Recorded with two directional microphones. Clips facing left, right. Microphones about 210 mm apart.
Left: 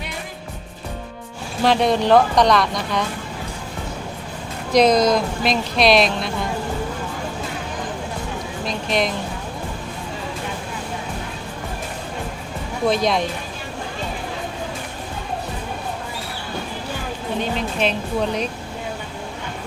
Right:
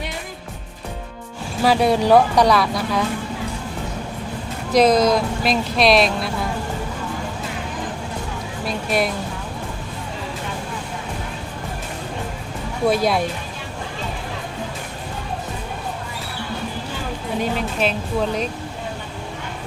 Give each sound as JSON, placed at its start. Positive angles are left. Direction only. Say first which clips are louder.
{"t": 1.6, "sound": "speech", "louder": "right 1 dB", "side_deg": -5}
{"t": 4.7, "sound": "speech", "louder": "even", "side_deg": -5}
{"t": 8.6, "sound": "speech", "louder": "right 1 dB", "side_deg": -5}
{"t": 12.9, "sound": "speech", "louder": "right 1 dB", "side_deg": -5}
{"t": 17.4, "sound": "speech", "louder": "right 1 dB", "side_deg": -5}